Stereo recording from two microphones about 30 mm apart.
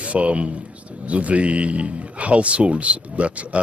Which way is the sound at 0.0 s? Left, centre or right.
Right.